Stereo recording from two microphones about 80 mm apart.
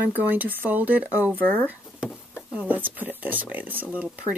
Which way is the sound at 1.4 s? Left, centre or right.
Centre.